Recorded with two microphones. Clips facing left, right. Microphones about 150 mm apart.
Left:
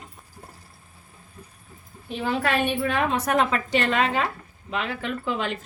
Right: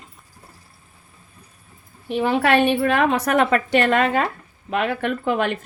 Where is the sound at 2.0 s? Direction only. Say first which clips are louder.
Right 6 dB; 65° right (ahead or behind).